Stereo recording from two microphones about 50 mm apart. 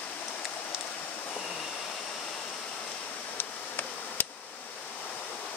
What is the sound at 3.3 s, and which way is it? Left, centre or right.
Bee, left.